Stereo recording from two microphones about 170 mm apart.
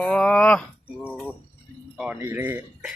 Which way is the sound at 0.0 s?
5° left (ahead or behind).